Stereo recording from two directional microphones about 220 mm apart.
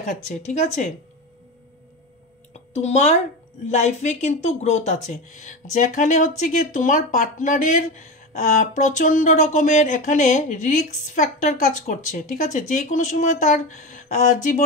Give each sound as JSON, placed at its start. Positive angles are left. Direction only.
{"t": 0.0, "sound": "speech", "side_deg": 35}
{"t": 2.7, "sound": "speech", "side_deg": 30}